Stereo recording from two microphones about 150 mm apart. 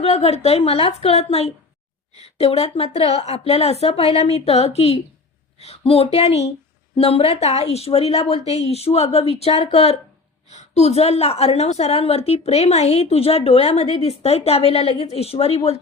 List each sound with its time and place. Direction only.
0.0 s a woman's voice: 45° left (ahead or behind)